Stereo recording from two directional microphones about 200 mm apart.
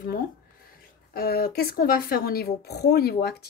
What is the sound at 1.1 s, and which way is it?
Speech, 50° left (ahead or behind).